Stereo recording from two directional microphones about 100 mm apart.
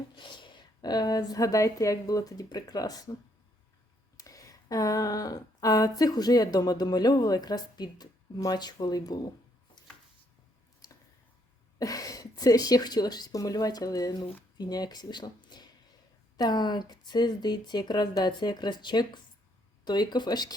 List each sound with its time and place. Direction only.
0.2 s speech: 50° left (ahead or behind)
4.2 s speech: 35° left (ahead or behind)
9.8 s a sound: 45° left (ahead or behind)
11.8 s a woman's voice: 35° left (ahead or behind)